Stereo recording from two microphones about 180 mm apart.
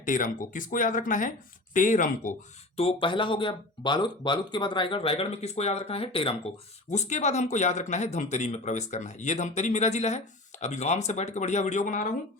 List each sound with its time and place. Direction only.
0.0 s speech: 50° left (ahead or behind)
2.7 s speech: 30° left (ahead or behind); by 12.1 s 45° left (ahead or behind)